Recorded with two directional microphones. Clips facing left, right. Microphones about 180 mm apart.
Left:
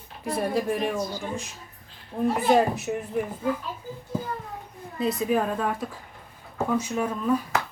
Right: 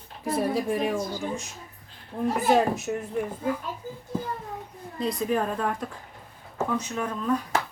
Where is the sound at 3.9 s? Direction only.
40° right (ahead or behind).